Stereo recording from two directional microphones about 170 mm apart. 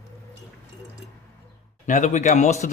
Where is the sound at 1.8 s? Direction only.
45° left (ahead or behind).